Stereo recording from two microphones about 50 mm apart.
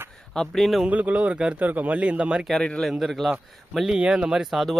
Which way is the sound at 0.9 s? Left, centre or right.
Right.